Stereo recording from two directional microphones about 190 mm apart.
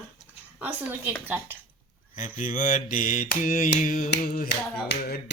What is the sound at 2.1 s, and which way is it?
Mantra, 45° left (ahead or behind).